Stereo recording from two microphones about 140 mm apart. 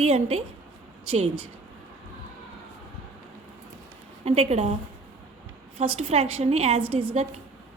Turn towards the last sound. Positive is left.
turn(degrees=-45)  # may be behind; listen again after turning